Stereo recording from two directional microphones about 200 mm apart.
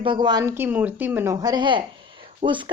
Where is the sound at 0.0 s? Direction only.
25° right (ahead or behind).